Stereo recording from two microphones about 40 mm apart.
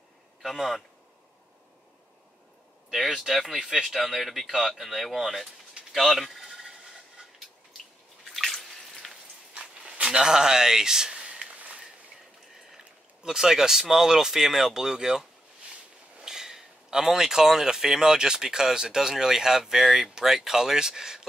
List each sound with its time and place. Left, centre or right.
0.6 s speech: centre
3.1 s speech: centre
5.9 s a sound: centre
8.2 s bathtub: centre
10.0 s a sound: centre
12.7 s speech: centre
16.3 s speech: centre